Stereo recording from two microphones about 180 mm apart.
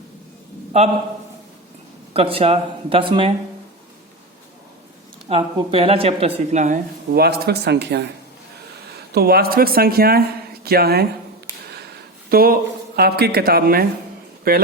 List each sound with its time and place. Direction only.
2.1 s a woman's voice: 30° right (ahead or behind)
5.3 s a woman's voice: 30° right (ahead or behind)
7.1 s speech: 60° right (ahead or behind)
9.1 s speech: 60° right (ahead or behind)
12.3 s speech: 55° right (ahead or behind)